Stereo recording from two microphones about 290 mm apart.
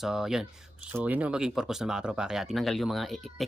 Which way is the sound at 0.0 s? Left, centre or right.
Centre.